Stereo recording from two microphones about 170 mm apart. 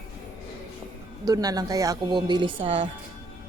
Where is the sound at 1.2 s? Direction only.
20° right (ahead or behind).